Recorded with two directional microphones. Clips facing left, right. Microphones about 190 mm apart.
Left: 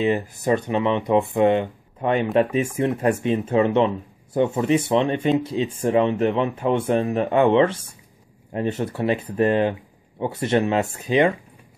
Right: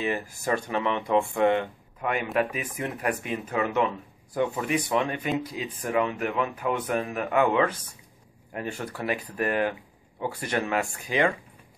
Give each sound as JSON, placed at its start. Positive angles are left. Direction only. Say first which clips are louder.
{"t": 0.0, "sound": "speech", "louder": "left 7 dB", "side_deg": 20}